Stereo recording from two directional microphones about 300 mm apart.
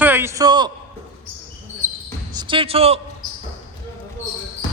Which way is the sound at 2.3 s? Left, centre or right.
Centre.